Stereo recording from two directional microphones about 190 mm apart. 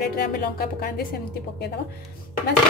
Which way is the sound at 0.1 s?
55° left (ahead or behind).